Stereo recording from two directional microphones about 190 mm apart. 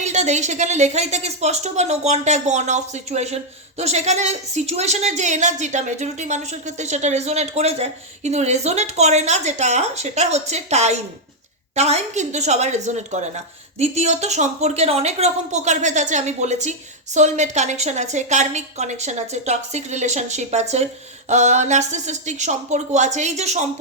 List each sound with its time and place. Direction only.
0.0 s a woman's voice: 35° right (ahead or behind)